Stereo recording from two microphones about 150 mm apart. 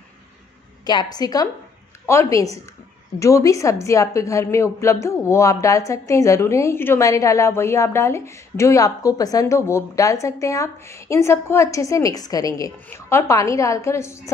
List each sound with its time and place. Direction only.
1.1 s a woman's voice: 25° left (ahead or behind)